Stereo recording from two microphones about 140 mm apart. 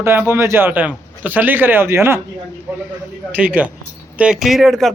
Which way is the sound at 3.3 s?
15° right (ahead or behind).